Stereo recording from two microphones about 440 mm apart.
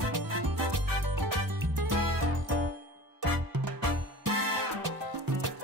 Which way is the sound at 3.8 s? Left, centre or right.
Right.